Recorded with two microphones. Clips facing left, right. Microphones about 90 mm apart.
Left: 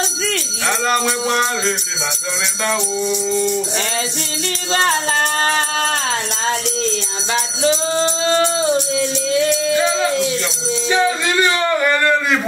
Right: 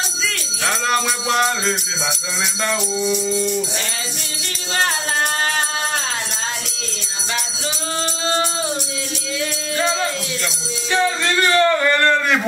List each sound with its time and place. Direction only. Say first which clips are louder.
0.8 s music: left 2 dB; centre (ahead or behind)
2.6 s music: left 2 dB; centre (ahead or behind)
7.6 s music: left 11 dB; 30° left (ahead or behind)
10.9 s music: left 1 dB; 10° left (ahead or behind)